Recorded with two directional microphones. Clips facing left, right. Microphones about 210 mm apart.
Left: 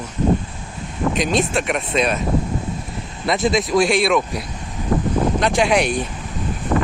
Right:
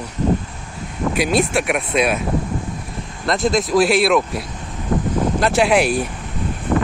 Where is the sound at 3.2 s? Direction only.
Centre (ahead or behind).